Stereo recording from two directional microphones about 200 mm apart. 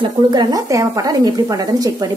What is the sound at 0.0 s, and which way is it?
Speech, 20° right (ahead or behind).